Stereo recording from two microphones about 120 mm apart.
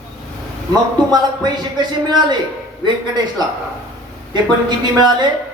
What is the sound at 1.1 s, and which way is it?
Speech, 35° right (ahead or behind).